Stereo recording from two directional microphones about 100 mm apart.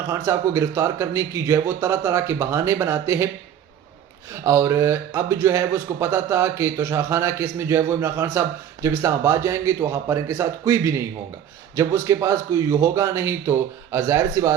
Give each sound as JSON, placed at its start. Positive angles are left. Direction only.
{"t": 0.1, "sound": "a man's voice", "side_deg": -30}
{"t": 4.3, "sound": "a man's voice", "side_deg": -30}